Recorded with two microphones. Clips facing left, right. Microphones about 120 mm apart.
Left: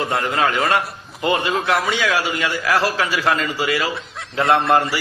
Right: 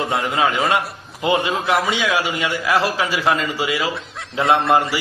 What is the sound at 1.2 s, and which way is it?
A man's voice, 20° right (ahead or behind).